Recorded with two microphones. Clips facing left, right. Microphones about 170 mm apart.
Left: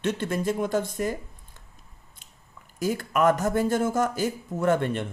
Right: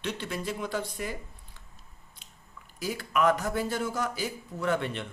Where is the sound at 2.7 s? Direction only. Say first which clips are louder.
Left 4 dB; 45° left (ahead or behind).